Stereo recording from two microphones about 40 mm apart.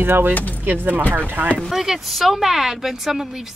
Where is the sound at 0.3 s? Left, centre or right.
Left.